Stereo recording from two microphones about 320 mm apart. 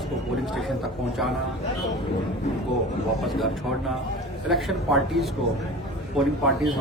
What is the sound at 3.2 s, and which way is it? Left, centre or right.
Speech, centre.